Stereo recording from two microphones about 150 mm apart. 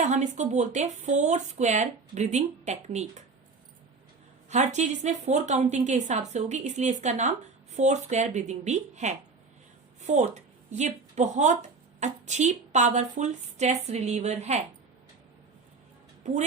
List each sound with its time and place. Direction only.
0.0 s speech: 50° right (ahead or behind)
4.4 s speech: 50° right (ahead or behind)
16.2 s speech: 50° right (ahead or behind)